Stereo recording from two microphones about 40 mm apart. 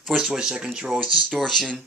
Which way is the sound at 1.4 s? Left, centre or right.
Centre.